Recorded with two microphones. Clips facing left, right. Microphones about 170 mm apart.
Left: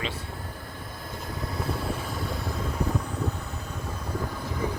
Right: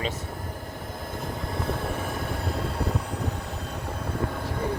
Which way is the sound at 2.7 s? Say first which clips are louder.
Even; 70° right (ahead or behind).